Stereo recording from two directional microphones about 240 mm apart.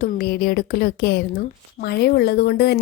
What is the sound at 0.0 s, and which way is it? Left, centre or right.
A woman's voice, left.